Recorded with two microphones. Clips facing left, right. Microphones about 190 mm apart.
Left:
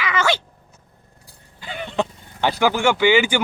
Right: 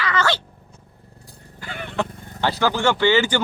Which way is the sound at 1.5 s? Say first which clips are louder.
Left 2 dB; 20° left (ahead or behind).